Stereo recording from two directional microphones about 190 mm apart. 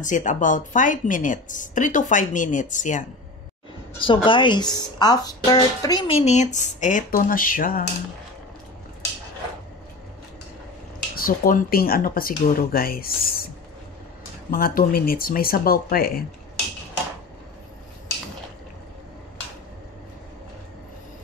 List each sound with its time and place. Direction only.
0.0 s a woman's voice: 40° left (ahead or behind)
4.0 s speech: 25° left (ahead or behind); by 7.8 s 45° left (ahead or behind)
11.1 s a woman's voice: 50° left (ahead or behind)
14.5 s a woman's voice: 50° left (ahead or behind)